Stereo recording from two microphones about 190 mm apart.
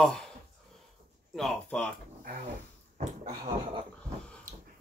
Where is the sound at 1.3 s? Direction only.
Centre (ahead or behind).